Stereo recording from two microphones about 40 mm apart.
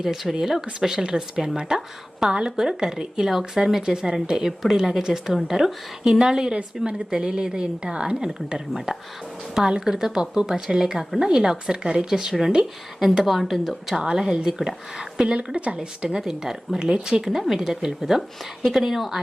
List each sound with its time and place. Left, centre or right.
0.0 s a woman's voice: centre
2.6 s a woman's voice: centre
6.8 s a woman's voice: centre
7.1 s a woman's voice: right
8.5 s a woman's voice: centre
13.2 s speech: centre
13.9 s a woman's voice: centre
15.4 s a woman's voice: right
16.0 s a woman's voice: centre